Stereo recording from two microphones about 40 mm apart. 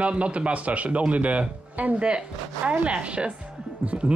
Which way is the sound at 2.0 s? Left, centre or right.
Right.